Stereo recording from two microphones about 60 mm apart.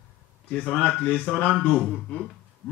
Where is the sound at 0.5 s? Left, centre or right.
Left.